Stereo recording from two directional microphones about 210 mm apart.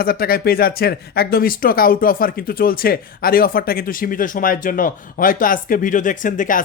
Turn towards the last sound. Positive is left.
turn(degrees=40)  # may be behind; listen again after turning